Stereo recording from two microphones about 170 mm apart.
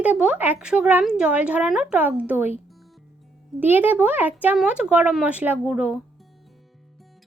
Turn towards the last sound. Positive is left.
turn(degrees=-5)  # may be behind; listen again after turning